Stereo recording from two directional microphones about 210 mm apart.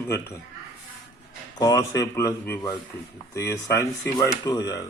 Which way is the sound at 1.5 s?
15° left (ahead or behind).